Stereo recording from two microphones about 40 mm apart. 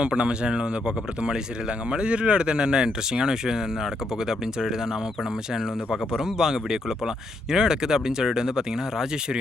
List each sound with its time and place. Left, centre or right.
0.0 s speech: right
5.9 s speech: centre